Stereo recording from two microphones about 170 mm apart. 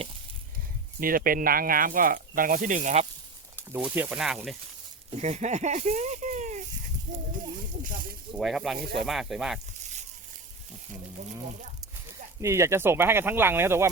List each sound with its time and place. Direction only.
0.9 s speech: 55° right (ahead or behind)
3.7 s speech: 10° right (ahead or behind)
5.1 s speech: 40° right (ahead or behind)
8.4 s speech: centre (ahead or behind)
12.4 s speech: 15° right (ahead or behind)